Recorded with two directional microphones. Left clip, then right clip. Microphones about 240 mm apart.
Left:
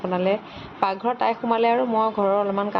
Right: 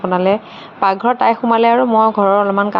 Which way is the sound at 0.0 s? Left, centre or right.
Centre.